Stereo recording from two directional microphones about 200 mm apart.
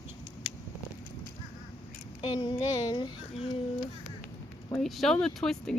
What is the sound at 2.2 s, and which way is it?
Speech, 20° left (ahead or behind).